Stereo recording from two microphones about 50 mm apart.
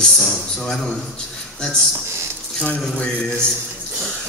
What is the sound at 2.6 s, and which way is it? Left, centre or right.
Speech, left.